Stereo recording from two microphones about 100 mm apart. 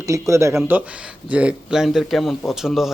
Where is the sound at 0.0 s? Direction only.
30° right (ahead or behind).